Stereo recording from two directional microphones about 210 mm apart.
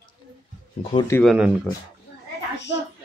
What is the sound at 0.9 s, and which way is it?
Speech, 15° left (ahead or behind).